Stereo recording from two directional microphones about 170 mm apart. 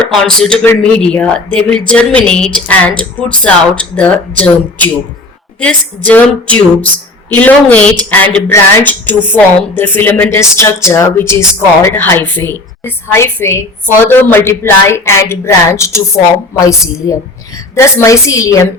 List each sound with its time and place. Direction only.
0.0 s a man's voice: 5° left (ahead or behind)
6.1 s a woman's voice: 10° left (ahead or behind)